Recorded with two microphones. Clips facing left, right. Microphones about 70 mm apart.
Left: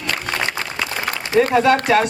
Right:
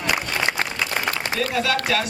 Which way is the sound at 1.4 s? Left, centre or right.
Left.